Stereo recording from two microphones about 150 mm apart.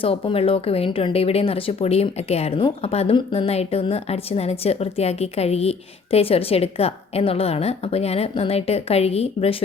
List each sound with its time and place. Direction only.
0.0 s speech: 40° left (ahead or behind)